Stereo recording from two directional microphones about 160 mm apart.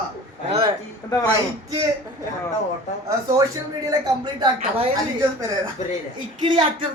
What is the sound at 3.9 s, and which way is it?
Speech, 25° right (ahead or behind).